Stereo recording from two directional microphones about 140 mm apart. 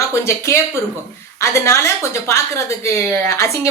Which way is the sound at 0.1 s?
20° left (ahead or behind).